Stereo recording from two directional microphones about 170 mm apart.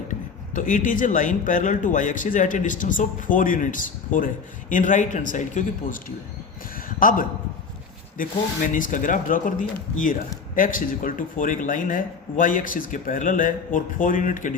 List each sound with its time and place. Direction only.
0.1 s speech: 50° left (ahead or behind)
6.7 s a sound: 55° left (ahead or behind)
8.2 s speech: 50° left (ahead or behind)